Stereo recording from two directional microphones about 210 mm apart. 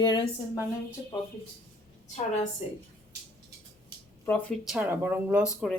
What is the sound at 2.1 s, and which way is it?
Speech, 30° left (ahead or behind).